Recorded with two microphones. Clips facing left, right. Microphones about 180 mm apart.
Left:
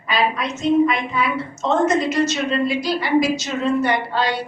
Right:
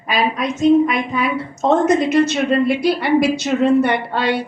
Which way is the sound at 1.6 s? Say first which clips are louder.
Right 4 dB; 55° right (ahead or behind).